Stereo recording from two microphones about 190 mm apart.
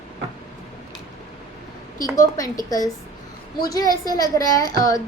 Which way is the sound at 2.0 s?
20° left (ahead or behind).